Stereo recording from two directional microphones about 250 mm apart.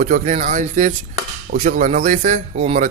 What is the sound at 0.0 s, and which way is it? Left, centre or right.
A man's voice, right.